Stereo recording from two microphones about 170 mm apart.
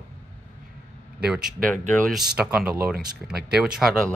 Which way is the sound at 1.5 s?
50° right (ahead or behind).